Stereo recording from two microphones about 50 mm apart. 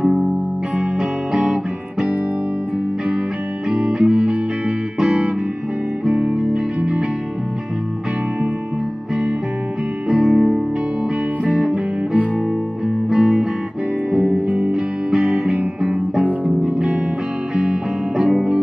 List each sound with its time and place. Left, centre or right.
1.4 s guitar: right
3.7 s music: right
10.0 s music: centre
14.7 s music: centre
15.2 s music: right